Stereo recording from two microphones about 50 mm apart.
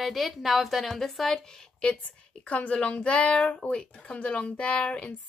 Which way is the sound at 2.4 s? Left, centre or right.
Left.